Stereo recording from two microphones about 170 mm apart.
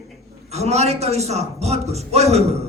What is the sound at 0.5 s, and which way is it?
Speech, 40° right (ahead or behind).